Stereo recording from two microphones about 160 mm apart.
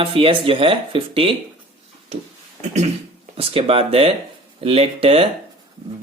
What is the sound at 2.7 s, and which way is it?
Speech, 45° right (ahead or behind).